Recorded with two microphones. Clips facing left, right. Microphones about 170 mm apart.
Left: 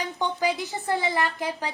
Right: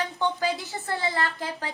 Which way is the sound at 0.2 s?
15° left (ahead or behind).